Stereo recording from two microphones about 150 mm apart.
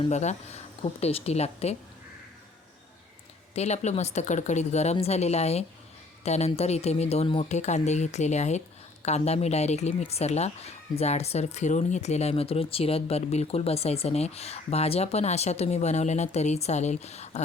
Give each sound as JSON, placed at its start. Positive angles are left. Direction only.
{"t": 0.0, "sound": "speech", "side_deg": 50}
{"t": 3.5, "sound": "speech", "side_deg": 45}